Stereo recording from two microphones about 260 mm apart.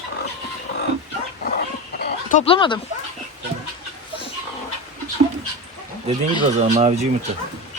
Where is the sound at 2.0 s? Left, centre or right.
Left.